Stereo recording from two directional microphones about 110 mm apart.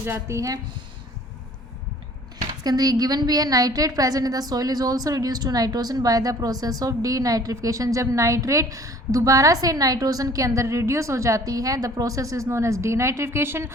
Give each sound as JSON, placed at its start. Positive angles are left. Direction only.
{"t": 0.0, "sound": "speech", "side_deg": -25}
{"t": 2.6, "sound": "a woman's voice", "side_deg": -35}